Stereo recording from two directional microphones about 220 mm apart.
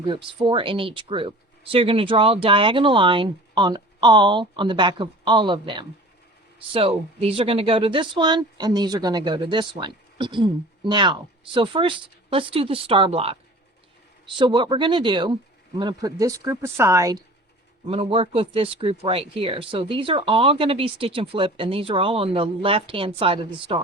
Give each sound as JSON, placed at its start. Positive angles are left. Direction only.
{"t": 0.0, "sound": "speech", "side_deg": -20}
{"t": 17.8, "sound": "speech", "side_deg": -25}